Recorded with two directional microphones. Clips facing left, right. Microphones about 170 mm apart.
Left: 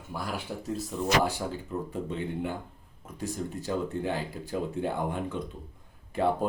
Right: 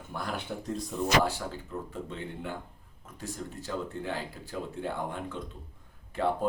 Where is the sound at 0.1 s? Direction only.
5° left (ahead or behind).